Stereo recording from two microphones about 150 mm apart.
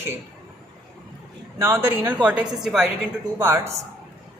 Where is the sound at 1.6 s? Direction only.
15° right (ahead or behind).